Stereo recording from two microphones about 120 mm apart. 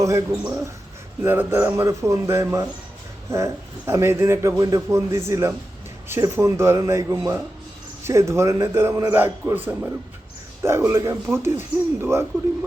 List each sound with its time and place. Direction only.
0.0 s a man's voice: 30° right (ahead or behind)
1.2 s a man's voice: 15° right (ahead or behind)